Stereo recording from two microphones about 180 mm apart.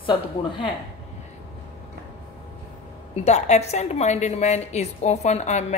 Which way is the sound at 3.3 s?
40° left (ahead or behind).